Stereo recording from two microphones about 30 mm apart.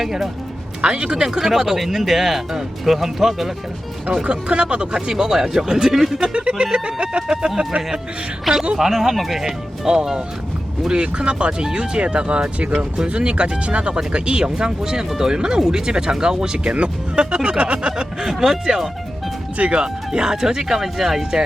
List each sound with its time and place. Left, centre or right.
0.0 s speech: centre
0.8 s speech: right; by 3.5 s centre
4.3 s speech: right
5.1 s speech: centre
6.3 s speech: right
7.3 s speech: right
8.5 s speech: centre
10.9 s speech: right
16.7 s speech: right
18.2 s speech: centre
19.5 s speech: right
19.8 s speech: right; by 21.2 s centre